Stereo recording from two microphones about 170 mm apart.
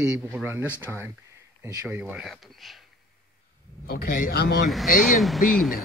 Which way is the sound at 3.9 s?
60° left (ahead or behind).